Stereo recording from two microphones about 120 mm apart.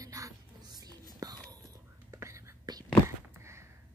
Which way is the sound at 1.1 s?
30° right (ahead or behind).